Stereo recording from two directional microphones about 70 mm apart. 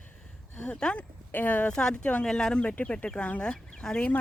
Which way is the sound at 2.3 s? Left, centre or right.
Centre.